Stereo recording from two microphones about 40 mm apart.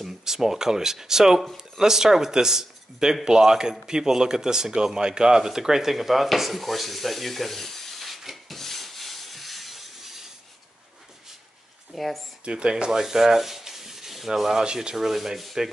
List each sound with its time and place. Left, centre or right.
0.2 s speech: centre
8.5 s rub: centre
11.9 s speech: centre
12.4 s speech: right
13.0 s sanding: centre
14.6 s speech: right
15.0 s speech: centre